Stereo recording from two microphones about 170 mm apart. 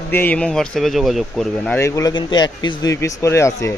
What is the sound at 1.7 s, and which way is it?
A man's voice, 15° left (ahead or behind).